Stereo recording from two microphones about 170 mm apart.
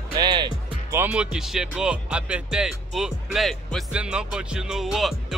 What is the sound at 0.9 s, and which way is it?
Speech, 5° right (ahead or behind).